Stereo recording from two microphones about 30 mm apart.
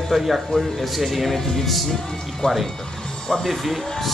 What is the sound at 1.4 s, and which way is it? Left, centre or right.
Music, centre.